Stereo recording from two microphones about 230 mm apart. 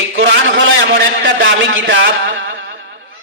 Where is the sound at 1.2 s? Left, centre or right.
Right.